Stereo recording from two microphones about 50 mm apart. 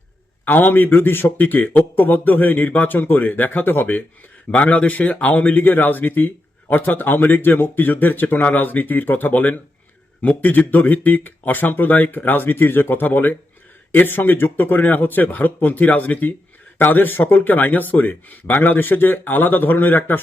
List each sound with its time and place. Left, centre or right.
0.6 s speech: left
4.5 s speech: left